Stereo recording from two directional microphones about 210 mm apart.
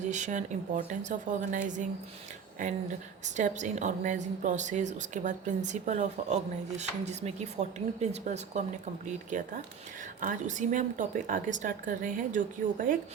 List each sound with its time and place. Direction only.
0.0 s a woman's voice: 35° right (ahead or behind)
3.2 s a woman's voice: 35° right (ahead or behind)